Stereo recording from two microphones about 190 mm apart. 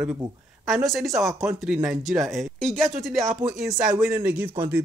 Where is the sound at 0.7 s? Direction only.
Centre (ahead or behind).